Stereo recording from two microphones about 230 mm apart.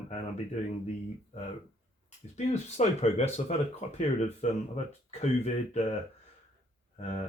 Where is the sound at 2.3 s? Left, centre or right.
Left.